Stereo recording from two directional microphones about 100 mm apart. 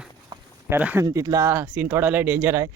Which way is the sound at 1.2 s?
35° right (ahead or behind).